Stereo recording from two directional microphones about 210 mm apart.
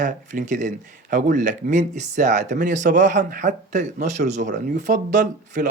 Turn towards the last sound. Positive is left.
turn(degrees=-35)  # may be behind; listen again after turning